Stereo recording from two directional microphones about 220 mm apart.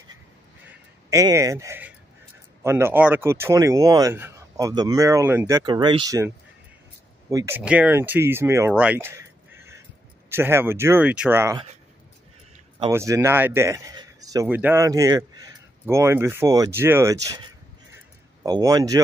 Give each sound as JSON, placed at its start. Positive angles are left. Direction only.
{"t": 1.1, "sound": "speech", "side_deg": -15}
{"t": 10.3, "sound": "speech", "side_deg": -10}
{"t": 12.9, "sound": "speech", "side_deg": -10}
{"t": 18.4, "sound": "speech", "side_deg": -15}